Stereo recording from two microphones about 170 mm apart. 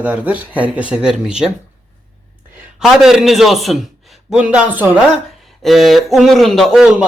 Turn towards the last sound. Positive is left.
turn(degrees=-5)  # may be behind; listen again after turning